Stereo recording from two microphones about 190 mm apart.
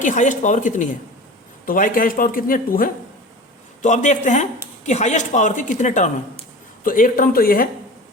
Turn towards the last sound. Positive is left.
turn(degrees=50)  # may be behind; listen again after turning